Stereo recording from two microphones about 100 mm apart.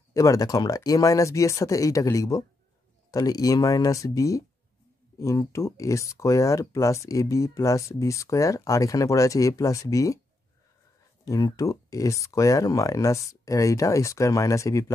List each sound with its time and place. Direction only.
0.1 s speech: 35° left (ahead or behind)
11.2 s speech: 35° left (ahead or behind)